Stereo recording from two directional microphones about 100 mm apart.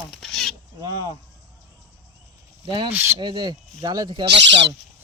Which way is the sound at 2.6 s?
55° right (ahead or behind).